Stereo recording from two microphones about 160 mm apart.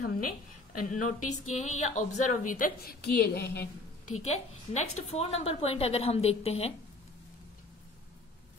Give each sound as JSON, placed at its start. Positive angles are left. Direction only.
{"t": 0.0, "sound": "a sound", "side_deg": 65}
{"t": 0.8, "sound": "a woman's voice", "side_deg": 50}
{"t": 4.2, "sound": "a woman's voice", "side_deg": 45}